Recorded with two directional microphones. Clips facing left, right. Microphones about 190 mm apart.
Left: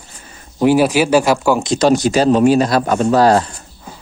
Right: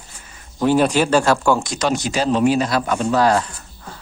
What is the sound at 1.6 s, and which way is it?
Speech, 30° left (ahead or behind).